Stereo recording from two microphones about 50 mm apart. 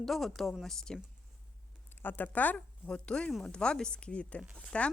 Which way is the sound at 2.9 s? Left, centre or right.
Centre.